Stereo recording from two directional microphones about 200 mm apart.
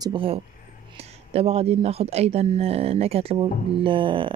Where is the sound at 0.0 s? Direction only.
25° right (ahead or behind).